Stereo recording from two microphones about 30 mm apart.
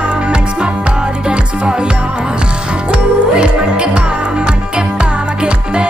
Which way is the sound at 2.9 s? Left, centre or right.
Right.